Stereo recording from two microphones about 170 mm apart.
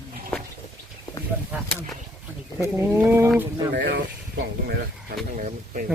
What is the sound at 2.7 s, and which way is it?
Speech, 15° right (ahead or behind).